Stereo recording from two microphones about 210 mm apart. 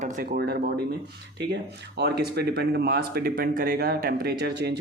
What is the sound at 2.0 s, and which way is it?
Speech, 50° right (ahead or behind).